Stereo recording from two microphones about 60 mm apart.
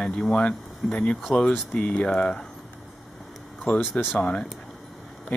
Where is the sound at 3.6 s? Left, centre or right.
Left.